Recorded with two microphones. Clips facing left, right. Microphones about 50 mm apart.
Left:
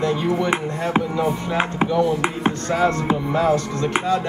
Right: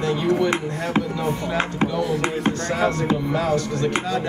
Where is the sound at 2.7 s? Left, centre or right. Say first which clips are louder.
Left 3 dB; left.